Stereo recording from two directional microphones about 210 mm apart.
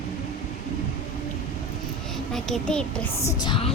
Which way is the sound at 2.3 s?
5° left (ahead or behind).